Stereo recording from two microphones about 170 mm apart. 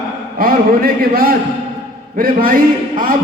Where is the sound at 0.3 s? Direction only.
60° right (ahead or behind).